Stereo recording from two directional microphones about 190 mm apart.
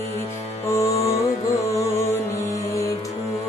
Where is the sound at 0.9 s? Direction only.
35° left (ahead or behind).